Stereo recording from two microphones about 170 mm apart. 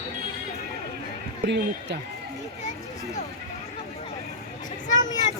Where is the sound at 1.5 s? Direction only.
90° right.